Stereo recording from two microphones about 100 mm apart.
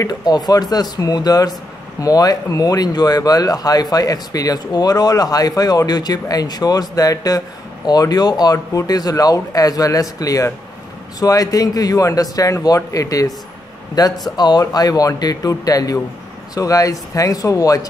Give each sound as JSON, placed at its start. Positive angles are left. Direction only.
{"t": 0.0, "sound": "speech", "side_deg": 40}